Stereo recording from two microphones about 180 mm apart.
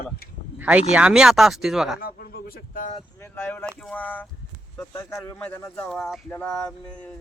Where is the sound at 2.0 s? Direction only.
55° left (ahead or behind).